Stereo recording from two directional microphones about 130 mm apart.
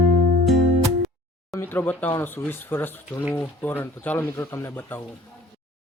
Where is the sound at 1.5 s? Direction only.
15° left (ahead or behind).